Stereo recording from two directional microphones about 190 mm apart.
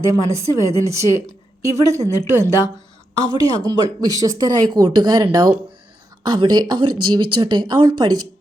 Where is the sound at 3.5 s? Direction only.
20° right (ahead or behind).